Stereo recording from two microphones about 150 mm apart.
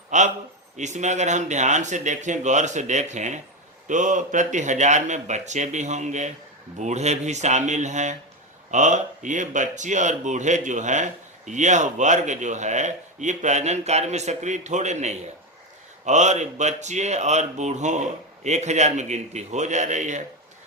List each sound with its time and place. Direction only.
0.1 s a man's voice: 55° right (ahead or behind)